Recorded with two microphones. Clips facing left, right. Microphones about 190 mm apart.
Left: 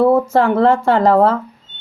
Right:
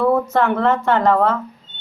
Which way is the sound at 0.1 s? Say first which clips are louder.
Left 4 dB; 25° left (ahead or behind).